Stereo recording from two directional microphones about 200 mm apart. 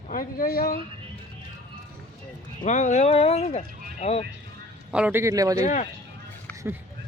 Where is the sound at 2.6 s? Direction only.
35° left (ahead or behind).